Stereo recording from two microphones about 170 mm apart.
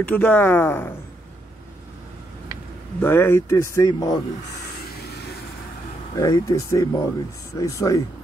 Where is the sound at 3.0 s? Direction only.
15° left (ahead or behind).